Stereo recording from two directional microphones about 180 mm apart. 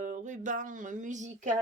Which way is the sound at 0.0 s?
45° right (ahead or behind).